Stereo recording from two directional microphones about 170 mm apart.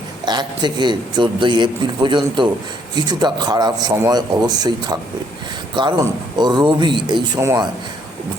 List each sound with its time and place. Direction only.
0.3 s a man's voice: 25° right (ahead or behind)